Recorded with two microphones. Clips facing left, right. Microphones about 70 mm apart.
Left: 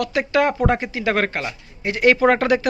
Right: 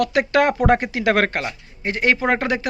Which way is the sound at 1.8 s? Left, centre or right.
Right.